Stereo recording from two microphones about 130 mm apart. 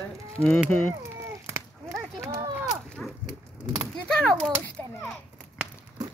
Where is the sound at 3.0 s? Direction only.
10° left (ahead or behind).